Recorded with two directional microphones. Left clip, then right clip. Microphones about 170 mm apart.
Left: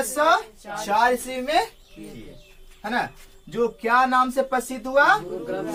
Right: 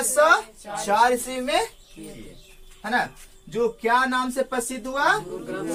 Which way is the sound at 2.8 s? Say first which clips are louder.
Right 2 dB; 20° right (ahead or behind).